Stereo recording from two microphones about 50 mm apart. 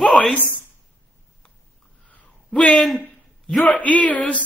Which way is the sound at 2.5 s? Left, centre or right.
Left.